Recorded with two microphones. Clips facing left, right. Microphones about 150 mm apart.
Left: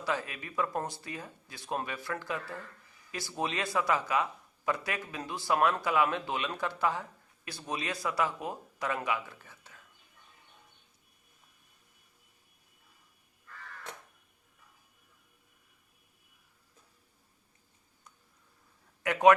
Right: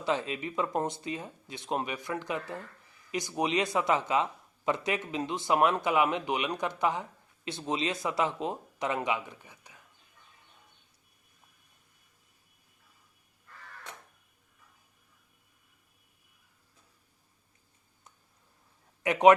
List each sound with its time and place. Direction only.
0.0 s speech: 20° right (ahead or behind)
19.0 s a man's voice: 20° right (ahead or behind)